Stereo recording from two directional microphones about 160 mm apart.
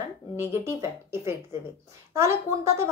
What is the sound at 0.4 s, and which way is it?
A woman's voice, 15° right (ahead or behind).